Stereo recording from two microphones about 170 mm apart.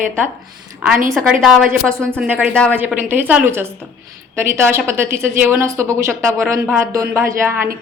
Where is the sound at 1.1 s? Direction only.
Centre (ahead or behind).